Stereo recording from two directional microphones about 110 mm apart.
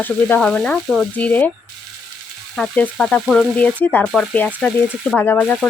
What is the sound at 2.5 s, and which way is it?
Frying, 10° left (ahead or behind).